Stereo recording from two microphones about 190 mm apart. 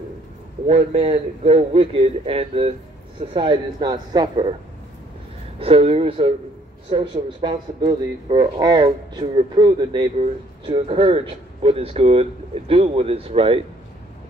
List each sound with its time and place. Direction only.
0.7 s speech: 35° right (ahead or behind)
5.6 s speech: 30° right (ahead or behind)